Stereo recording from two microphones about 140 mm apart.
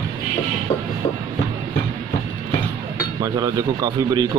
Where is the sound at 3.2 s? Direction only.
25° right (ahead or behind).